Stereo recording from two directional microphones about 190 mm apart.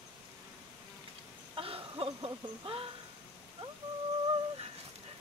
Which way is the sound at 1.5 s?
30° right (ahead or behind).